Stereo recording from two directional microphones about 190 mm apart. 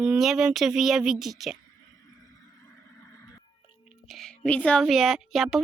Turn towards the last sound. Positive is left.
turn(degrees=0)  # may be behind; listen again after turning